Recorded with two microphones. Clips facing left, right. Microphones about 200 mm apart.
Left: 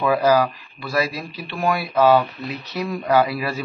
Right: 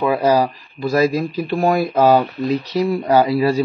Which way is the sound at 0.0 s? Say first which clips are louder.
Right 2 dB; 30° right (ahead or behind).